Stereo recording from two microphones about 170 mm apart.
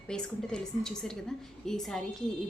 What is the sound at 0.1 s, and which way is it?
A woman's voice, 5° left (ahead or behind).